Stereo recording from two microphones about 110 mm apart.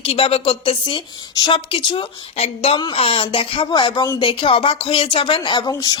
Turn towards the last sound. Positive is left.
turn(degrees=35)  # may be behind; listen again after turning